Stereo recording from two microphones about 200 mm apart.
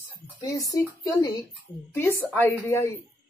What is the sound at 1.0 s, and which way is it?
Speech, 15° left (ahead or behind).